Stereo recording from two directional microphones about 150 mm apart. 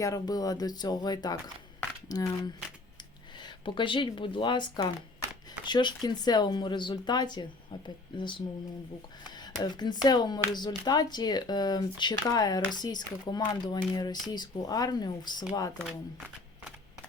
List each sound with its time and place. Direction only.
0.0 s speech: 25° left (ahead or behind)
9.4 s speech: 25° left (ahead or behind)